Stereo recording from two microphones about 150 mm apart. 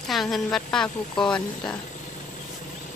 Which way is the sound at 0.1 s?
Centre (ahead or behind).